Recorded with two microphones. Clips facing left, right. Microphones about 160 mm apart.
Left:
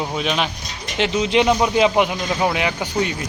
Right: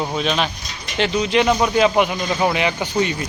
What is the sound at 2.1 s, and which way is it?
Speech, 5° left (ahead or behind).